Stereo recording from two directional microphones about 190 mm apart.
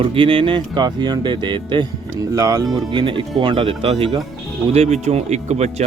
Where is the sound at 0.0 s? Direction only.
25° right (ahead or behind).